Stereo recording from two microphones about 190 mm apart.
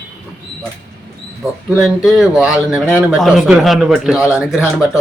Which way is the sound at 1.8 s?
Centre (ahead or behind).